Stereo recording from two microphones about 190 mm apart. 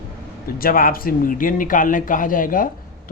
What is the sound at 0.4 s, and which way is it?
Speech, 50° left (ahead or behind).